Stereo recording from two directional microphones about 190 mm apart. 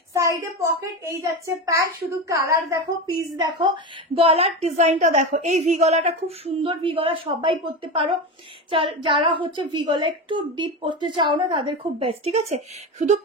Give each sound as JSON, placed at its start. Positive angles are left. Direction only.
{"t": 0.1, "sound": "a child's voice", "side_deg": -15}